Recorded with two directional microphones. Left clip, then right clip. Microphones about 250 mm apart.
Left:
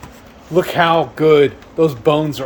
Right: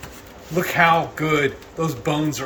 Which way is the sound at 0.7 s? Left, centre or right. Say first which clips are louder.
Left 1 dB; left.